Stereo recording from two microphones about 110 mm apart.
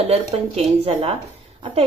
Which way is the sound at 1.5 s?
50° right (ahead or behind).